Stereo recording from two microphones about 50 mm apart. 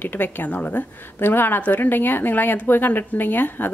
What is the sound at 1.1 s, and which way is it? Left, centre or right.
A woman's voice, left.